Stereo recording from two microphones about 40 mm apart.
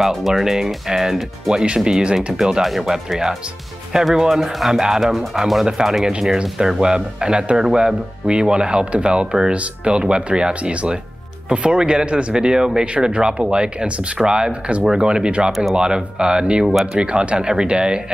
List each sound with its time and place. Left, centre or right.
0.0 s speech: centre
6.6 s speech: centre
10.5 s speech: right
12.8 s speech: right